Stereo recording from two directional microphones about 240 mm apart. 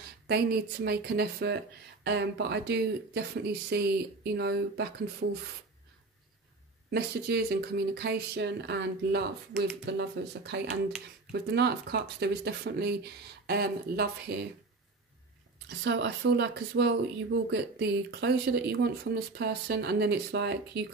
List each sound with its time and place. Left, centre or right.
0.3 s a woman's voice: right
6.9 s speech: right
15.8 s speech: right